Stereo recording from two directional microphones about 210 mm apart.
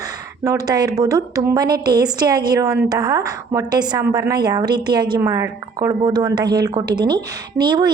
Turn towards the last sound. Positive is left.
turn(degrees=-20)  # may be behind; listen again after turning